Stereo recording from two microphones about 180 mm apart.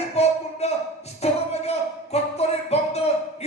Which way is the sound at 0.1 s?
35° left (ahead or behind).